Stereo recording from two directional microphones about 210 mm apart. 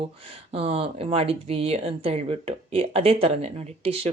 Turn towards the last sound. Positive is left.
turn(degrees=-30)  # may be behind; listen again after turning